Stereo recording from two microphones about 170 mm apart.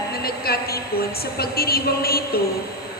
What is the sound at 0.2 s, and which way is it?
A woman's voice, 65° left (ahead or behind).